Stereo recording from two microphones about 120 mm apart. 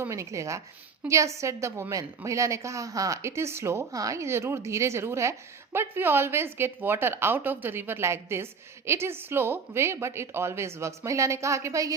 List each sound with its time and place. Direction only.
0.0 s a woman's voice: 25° right (ahead or behind)